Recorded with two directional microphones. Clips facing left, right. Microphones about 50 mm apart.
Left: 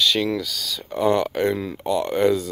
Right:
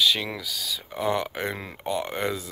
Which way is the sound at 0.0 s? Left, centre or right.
Centre.